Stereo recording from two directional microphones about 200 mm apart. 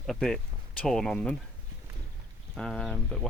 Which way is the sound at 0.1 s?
Centre (ahead or behind).